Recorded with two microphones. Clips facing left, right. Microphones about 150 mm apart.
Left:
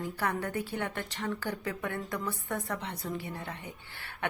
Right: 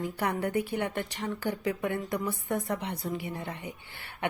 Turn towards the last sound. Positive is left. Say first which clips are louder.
# right 3 dB
turn(degrees=-15)  # may be behind; listen again after turning